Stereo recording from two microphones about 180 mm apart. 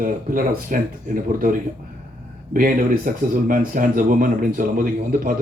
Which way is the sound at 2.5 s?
50° right (ahead or behind).